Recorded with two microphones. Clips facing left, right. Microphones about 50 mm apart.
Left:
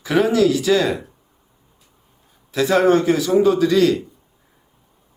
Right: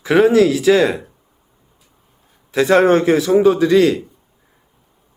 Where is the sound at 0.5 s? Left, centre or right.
Right.